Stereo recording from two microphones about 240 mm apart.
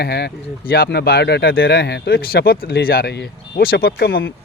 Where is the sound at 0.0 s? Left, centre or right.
Left.